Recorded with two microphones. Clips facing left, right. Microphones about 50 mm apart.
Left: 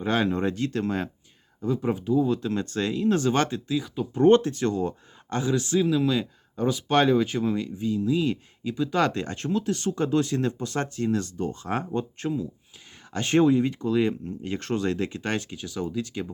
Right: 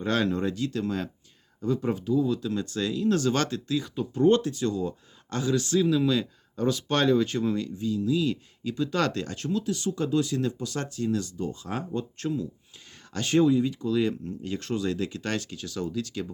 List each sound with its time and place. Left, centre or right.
0.0 s speech: centre
0.4 s speech: left
1.6 s speech: centre
2.2 s speech: left; by 4.0 s centre
4.2 s speech: left
5.3 s speech: left
7.9 s speech: left
8.6 s speech: centre
9.2 s speech: left
12.1 s speech: centre
13.1 s speech: left
15.2 s speech: left